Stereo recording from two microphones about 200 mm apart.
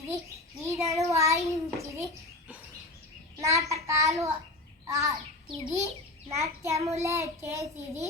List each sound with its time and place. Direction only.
0.6 s a child's voice: 15° right (ahead or behind)
1.1 s child singing: 15° right (ahead or behind)
1.5 s a child's voice: 15° right (ahead or behind)
3.4 s a child's voice: 15° right (ahead or behind)
5.1 s a child's voice: centre (ahead or behind)
6.3 s a child's voice: 15° right (ahead or behind)